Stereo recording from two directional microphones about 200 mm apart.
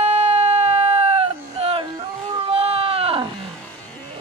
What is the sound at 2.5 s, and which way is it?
Sheep, 30° right (ahead or behind).